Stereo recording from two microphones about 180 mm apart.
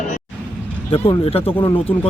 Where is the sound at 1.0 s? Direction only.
30° left (ahead or behind).